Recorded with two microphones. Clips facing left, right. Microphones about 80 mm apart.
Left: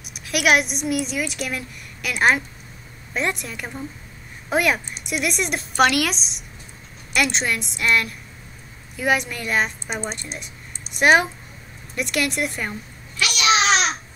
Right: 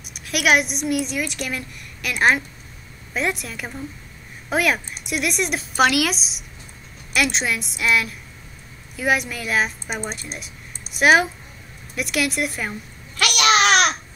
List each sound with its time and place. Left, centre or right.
0.0 s a woman's voice: centre
13.1 s babbling: right